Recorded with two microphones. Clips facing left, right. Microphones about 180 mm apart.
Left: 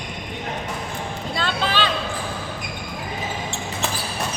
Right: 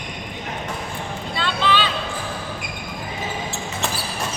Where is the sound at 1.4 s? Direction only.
45° left (ahead or behind).